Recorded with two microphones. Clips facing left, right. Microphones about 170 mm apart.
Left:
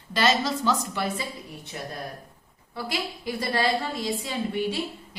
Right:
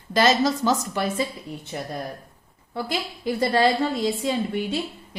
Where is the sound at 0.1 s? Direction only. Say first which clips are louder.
Right 4 dB; 40° right (ahead or behind).